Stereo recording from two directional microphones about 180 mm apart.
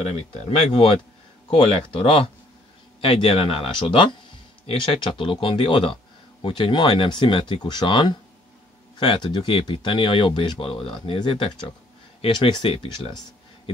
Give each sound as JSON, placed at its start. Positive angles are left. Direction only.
{"t": 0.0, "sound": "speech", "side_deg": 35}